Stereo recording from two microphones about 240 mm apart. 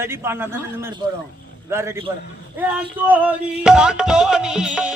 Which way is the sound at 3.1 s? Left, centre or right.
Centre.